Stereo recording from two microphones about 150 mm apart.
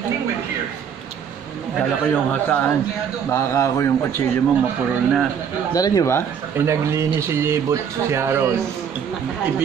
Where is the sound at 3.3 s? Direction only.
20° left (ahead or behind).